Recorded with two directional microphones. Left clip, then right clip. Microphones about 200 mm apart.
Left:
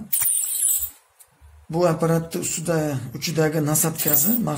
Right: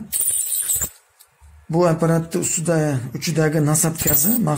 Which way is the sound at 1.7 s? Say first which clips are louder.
Right 2 dB; 25° right (ahead or behind).